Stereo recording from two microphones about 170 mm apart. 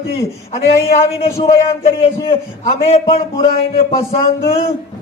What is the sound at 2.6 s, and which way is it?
A man's voice, 40° left (ahead or behind).